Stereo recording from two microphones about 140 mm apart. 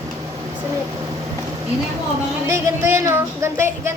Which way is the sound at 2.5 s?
20° right (ahead or behind).